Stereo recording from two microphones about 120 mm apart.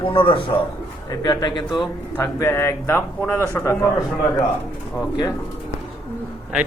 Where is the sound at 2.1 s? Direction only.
20° left (ahead or behind).